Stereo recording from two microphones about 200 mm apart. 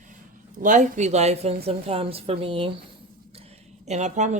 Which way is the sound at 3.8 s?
35° right (ahead or behind).